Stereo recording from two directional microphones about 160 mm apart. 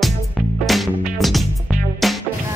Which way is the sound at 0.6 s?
Centre (ahead or behind).